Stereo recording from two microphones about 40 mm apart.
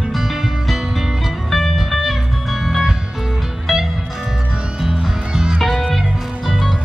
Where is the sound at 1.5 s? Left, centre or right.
Centre.